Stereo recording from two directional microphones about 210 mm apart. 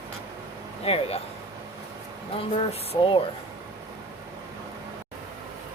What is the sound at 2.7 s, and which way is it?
Speech, 25° left (ahead or behind).